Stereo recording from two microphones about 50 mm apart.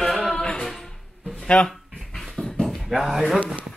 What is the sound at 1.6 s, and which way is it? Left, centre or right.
Dog, centre.